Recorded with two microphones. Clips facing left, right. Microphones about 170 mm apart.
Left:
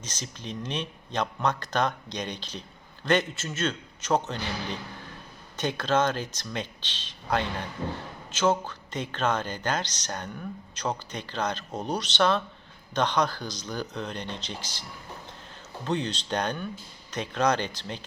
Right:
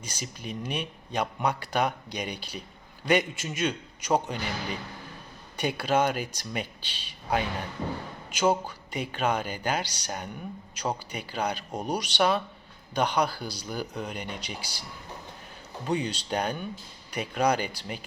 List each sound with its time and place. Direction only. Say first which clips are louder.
0.0 s speech: right 1 dB; 10° right (ahead or behind)